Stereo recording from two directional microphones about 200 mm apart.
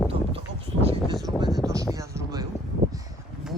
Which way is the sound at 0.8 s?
25° right (ahead or behind).